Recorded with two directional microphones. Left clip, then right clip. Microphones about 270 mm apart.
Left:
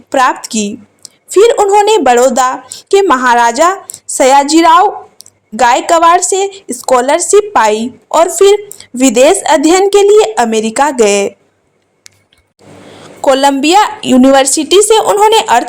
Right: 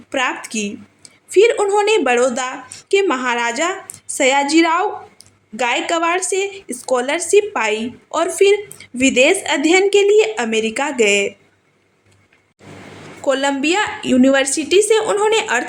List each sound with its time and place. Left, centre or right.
0.1 s a woman's voice: centre
13.2 s a woman's voice: left